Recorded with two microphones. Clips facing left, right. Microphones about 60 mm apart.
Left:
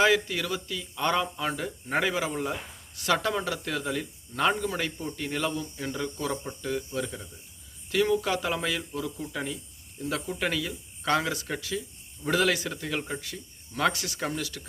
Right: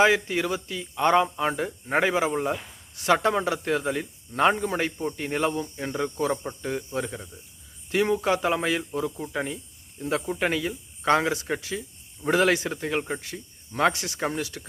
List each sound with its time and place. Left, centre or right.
0.0 s speech: right